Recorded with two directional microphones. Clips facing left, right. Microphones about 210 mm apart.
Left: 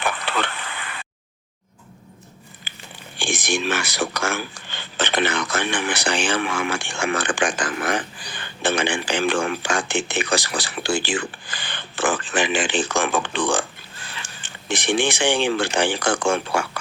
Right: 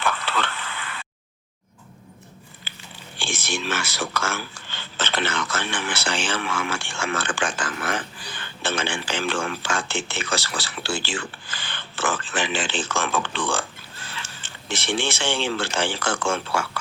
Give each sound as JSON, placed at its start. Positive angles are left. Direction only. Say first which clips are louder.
{"t": 0.0, "sound": "a sound", "louder": "left 1 dB", "side_deg": 15}
{"t": 2.7, "sound": "biting", "louder": "left 1 dB", "side_deg": 15}
{"t": 3.2, "sound": "speech", "louder": "left 5 dB", "side_deg": 15}